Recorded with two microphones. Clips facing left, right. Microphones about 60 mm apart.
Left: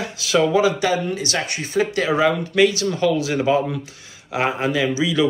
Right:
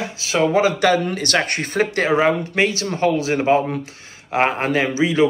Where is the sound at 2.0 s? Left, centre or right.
Right.